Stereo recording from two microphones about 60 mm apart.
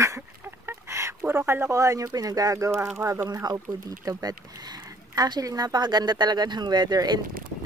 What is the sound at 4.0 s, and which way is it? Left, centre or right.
Speech, right.